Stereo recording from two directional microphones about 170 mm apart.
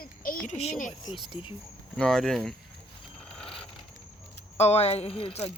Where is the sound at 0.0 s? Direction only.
55° left (ahead or behind).